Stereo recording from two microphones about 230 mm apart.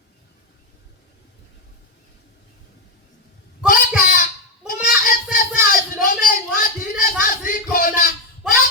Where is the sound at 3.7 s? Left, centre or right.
Left.